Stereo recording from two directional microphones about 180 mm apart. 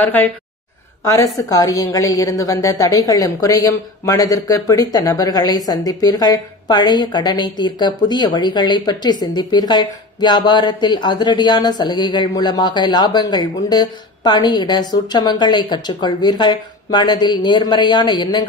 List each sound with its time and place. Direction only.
0.0 s speech: 10° left (ahead or behind)